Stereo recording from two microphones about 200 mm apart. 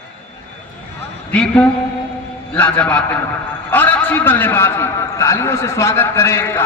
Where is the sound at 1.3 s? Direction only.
5° left (ahead or behind).